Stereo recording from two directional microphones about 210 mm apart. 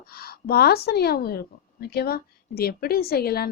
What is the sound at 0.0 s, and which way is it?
A woman's voice, 45° left (ahead or behind).